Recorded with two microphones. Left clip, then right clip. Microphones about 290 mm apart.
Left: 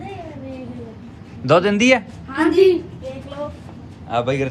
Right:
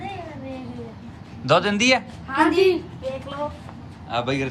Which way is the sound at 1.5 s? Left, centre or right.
Centre.